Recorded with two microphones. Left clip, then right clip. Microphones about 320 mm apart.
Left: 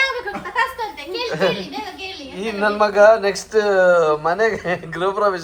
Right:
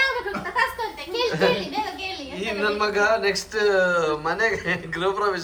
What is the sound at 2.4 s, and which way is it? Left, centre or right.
Speech, centre.